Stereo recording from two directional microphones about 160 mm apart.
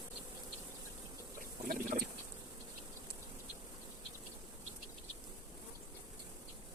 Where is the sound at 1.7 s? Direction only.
60° right (ahead or behind).